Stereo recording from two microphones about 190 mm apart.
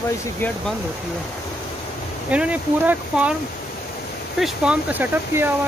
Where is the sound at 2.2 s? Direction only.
5° right (ahead or behind).